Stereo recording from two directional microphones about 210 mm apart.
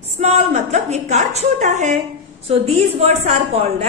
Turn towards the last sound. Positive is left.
turn(degrees=-30)  # may be behind; listen again after turning